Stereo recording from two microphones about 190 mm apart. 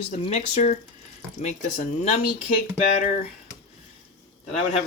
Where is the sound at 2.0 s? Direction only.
35° left (ahead or behind).